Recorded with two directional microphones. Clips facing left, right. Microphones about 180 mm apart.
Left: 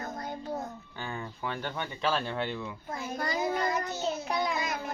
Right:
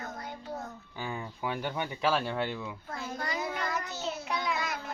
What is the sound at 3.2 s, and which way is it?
Child singing, 35° left (ahead or behind).